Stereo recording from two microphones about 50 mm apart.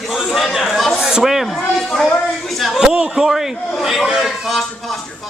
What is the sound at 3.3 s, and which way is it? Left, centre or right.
Speech, centre.